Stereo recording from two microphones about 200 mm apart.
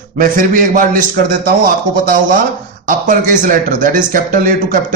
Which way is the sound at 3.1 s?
40° right (ahead or behind).